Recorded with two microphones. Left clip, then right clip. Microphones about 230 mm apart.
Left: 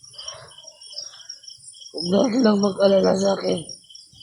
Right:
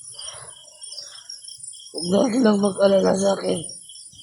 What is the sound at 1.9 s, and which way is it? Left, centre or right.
Speech, centre.